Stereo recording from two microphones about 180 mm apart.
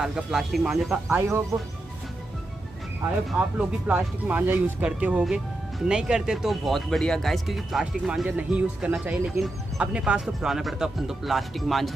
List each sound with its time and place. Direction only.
0.0 s speech: 5° right (ahead or behind)
1.1 s speech: 15° right (ahead or behind)
3.3 s speech: 5° right (ahead or behind)